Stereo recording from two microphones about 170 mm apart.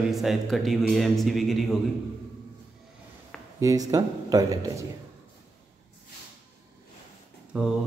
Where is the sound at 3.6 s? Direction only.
20° right (ahead or behind).